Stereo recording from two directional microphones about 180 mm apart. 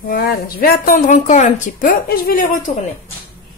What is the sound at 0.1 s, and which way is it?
A woman's voice, 55° left (ahead or behind).